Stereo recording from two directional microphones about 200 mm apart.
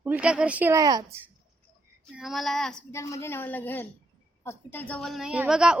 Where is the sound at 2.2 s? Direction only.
Centre (ahead or behind).